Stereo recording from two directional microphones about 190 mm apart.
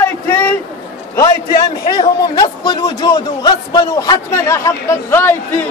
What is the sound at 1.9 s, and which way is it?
A man's voice, 20° left (ahead or behind).